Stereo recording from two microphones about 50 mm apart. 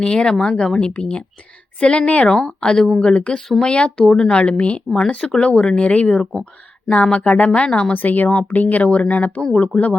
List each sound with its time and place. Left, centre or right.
0.0 s speech: centre
4.9 s speech: centre; by 7.5 s left
7.5 s speech: left
7.9 s speech: left